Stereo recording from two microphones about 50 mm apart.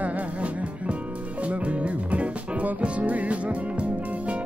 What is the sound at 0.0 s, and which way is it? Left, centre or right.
Music, right.